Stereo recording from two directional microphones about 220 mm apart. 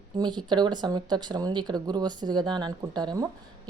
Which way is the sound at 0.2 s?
20° right (ahead or behind).